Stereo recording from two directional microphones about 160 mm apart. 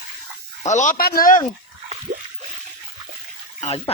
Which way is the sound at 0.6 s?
50° left (ahead or behind).